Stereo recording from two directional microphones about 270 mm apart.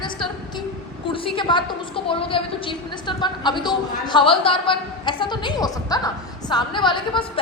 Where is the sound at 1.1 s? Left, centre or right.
Centre.